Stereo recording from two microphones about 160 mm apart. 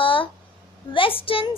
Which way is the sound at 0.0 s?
35° left (ahead or behind).